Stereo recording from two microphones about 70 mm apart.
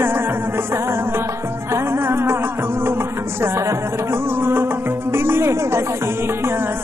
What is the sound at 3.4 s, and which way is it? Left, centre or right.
Music, right.